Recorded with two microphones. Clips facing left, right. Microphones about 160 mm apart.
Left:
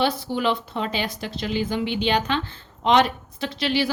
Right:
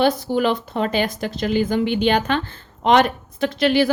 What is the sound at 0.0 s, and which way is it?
A woman's voice, 45° right (ahead or behind).